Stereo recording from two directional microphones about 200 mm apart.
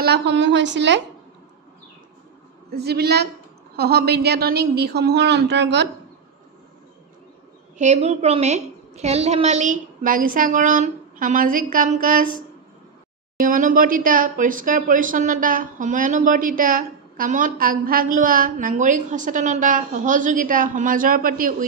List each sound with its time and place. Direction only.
0.0 s a woman's voice: 60° right (ahead or behind)
2.7 s a woman's voice: 55° right (ahead or behind)
7.7 s speech: 35° right (ahead or behind)